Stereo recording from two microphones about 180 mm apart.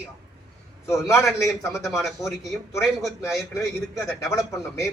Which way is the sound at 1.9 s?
Centre (ahead or behind).